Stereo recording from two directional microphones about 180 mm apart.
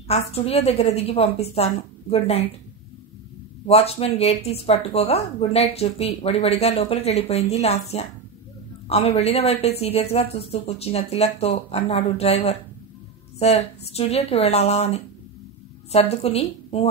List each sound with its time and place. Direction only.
0.1 s speech: 35° left (ahead or behind)
3.6 s speech: 35° left (ahead or behind)